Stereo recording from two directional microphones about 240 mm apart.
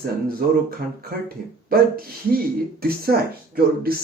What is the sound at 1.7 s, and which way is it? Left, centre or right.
Speech, right.